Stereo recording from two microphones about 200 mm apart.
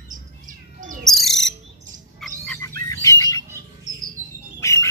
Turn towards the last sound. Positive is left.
turn(degrees=15)  # may be behind; listen again after turning